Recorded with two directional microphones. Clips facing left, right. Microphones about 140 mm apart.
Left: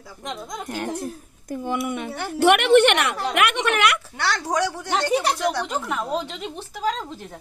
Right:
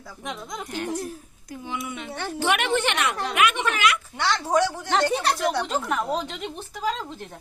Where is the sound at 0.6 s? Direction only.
50° left (ahead or behind).